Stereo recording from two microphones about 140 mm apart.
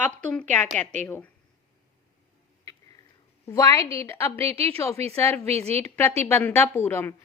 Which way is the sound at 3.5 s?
25° left (ahead or behind).